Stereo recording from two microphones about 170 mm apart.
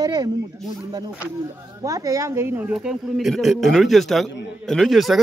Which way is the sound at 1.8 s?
20° right (ahead or behind).